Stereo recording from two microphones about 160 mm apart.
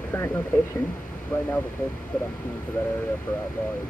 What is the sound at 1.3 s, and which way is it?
Speech, 10° left (ahead or behind).